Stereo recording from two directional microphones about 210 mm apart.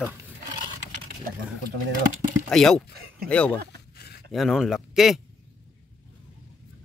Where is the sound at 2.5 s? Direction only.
Centre (ahead or behind).